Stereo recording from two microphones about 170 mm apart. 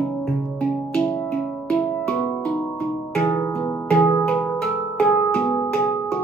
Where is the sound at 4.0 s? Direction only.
5° left (ahead or behind).